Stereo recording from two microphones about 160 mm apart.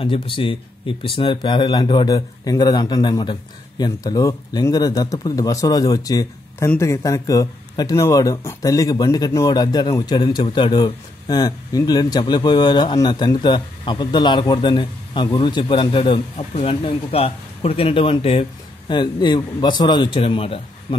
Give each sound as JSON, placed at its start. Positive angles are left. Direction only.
{"t": 0.0, "sound": "speech", "side_deg": 35}